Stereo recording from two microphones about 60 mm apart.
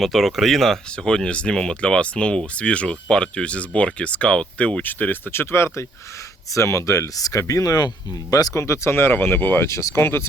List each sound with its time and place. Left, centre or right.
0.0 s speech: centre
1.0 s speech: centre
5.3 s speech: left
6.5 s speech: left
8.3 s speech: left
8.5 s speech: left
9.6 s speech: left